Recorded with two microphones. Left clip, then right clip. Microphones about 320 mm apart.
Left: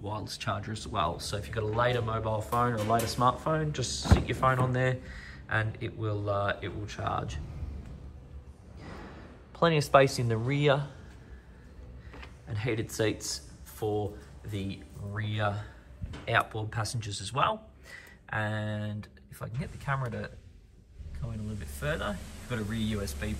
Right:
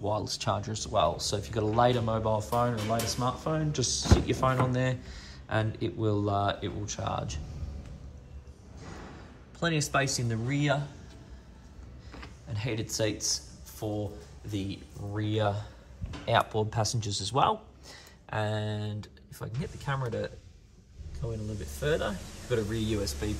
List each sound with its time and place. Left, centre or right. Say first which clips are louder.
0.0 s speech: right 5 dB; centre
9.6 s speech: left 6 dB; centre
12.4 s speech: left 2 dB; centre
21.7 s speech: right 4 dB; centre